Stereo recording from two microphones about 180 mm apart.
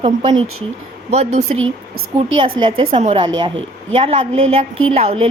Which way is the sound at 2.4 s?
25° right (ahead or behind).